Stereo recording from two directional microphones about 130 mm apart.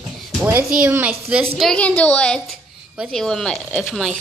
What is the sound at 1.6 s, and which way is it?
A woman's voice, 5° left (ahead or behind).